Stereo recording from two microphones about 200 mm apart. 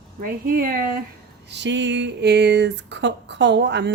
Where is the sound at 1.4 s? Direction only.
60° right (ahead or behind).